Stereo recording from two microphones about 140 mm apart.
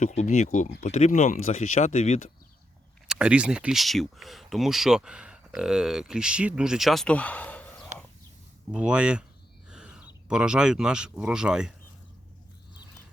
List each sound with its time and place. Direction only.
0.0 s speech: 55° left (ahead or behind)
3.1 s speech: 5° right (ahead or behind); by 7.9 s 10° left (ahead or behind)
8.7 s speech: 5° right (ahead or behind)
9.6 s a sound: 5° right (ahead or behind)
10.2 s speech: 5° right (ahead or behind)